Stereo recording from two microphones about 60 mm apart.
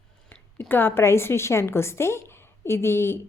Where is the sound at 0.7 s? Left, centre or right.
Left.